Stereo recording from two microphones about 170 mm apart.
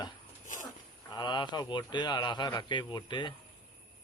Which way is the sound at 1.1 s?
25° left (ahead or behind).